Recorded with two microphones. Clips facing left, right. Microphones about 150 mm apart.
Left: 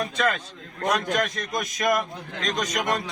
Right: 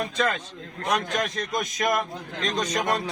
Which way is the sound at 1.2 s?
25° right (ahead or behind).